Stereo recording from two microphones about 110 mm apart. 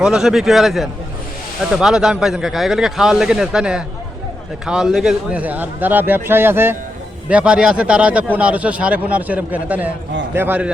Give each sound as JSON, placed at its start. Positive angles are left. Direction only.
{"t": 0.0, "sound": "speech", "side_deg": -5}